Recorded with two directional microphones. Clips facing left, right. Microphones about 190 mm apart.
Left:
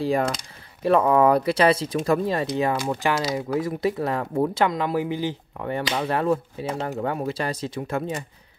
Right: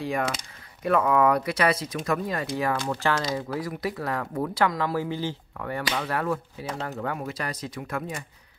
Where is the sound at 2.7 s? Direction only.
15° left (ahead or behind).